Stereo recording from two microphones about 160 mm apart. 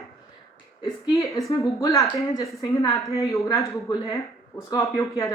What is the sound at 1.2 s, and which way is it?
Speech, centre (ahead or behind).